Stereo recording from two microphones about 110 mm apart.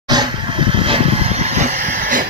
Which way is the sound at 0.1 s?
45° right (ahead or behind).